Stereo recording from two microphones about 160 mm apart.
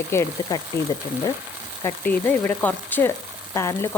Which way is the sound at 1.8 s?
15° left (ahead or behind).